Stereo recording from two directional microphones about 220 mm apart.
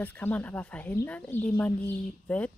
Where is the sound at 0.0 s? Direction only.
10° left (ahead or behind).